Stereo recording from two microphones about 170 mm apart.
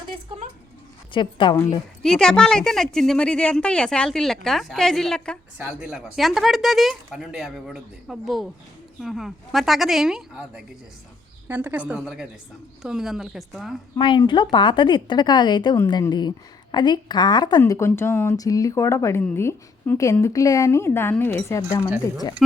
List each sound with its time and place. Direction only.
0.3 s a sound: 30° right (ahead or behind)
1.1 s a woman's voice: 30° left (ahead or behind)
2.0 s a woman's voice: 5° left (ahead or behind)
5.5 s a woman's voice: 5° right (ahead or behind)
14.0 s a woman's voice: 25° left (ahead or behind)
22.4 s a woman's voice: centre (ahead or behind)